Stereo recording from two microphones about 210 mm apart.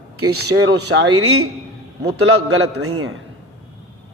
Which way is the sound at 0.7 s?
55° right (ahead or behind).